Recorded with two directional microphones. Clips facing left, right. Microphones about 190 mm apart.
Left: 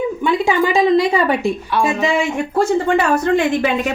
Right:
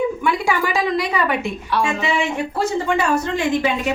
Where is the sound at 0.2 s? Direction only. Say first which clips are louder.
Left 4 dB; 20° left (ahead or behind).